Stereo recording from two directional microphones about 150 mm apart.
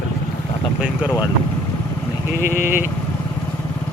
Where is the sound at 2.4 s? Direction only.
55° left (ahead or behind).